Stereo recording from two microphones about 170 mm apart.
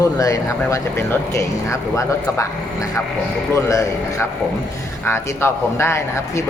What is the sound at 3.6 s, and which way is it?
Speech, 20° left (ahead or behind).